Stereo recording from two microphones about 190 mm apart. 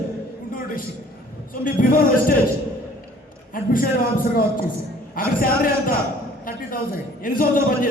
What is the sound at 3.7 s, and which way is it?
A man's voice, 50° left (ahead or behind).